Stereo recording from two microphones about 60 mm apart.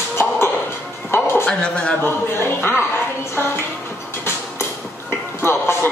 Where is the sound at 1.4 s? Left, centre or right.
Centre.